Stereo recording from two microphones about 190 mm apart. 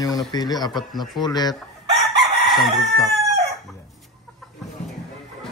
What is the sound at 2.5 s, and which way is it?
Speech, centre (ahead or behind).